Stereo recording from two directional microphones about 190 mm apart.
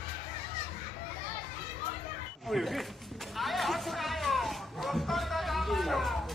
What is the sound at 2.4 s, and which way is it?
Dog, centre (ahead or behind).